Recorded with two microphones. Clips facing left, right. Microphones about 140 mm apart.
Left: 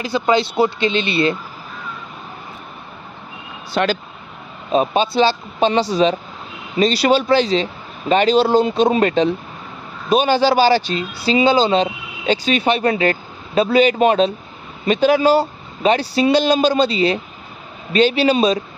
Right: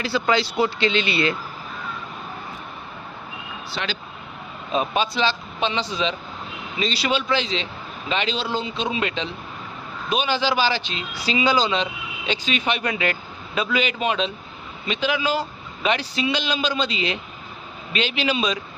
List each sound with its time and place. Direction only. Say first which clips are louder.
0.0 s speech: left 4 dB; 20° left (ahead or behind)
3.7 s speech: left 12 dB; 50° left (ahead or behind)
4.7 s speech: left 7 dB; 30° left (ahead or behind)